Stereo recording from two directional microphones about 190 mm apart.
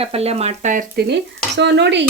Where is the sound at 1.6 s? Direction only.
65° right (ahead or behind).